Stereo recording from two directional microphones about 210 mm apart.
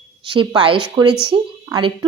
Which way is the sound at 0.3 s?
25° right (ahead or behind).